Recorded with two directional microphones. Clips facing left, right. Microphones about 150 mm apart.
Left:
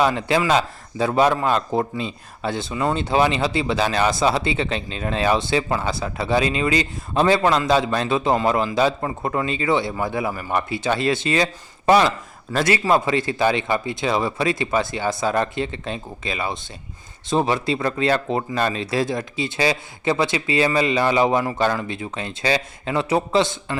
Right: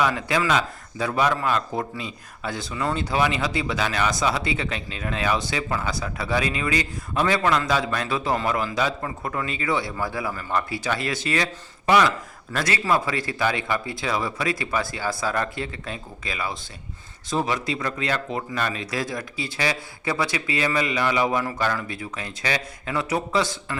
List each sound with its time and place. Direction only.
0.0 s speech: 30° left (ahead or behind)